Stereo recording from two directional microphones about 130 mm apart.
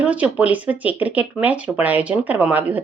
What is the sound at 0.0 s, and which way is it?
A woman's voice, 10° right (ahead or behind).